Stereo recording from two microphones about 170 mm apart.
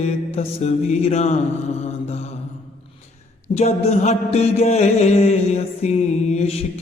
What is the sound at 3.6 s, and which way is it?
Mantra, 40° left (ahead or behind).